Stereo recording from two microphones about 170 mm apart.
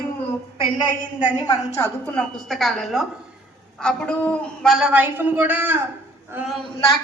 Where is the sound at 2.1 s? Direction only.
Centre (ahead or behind).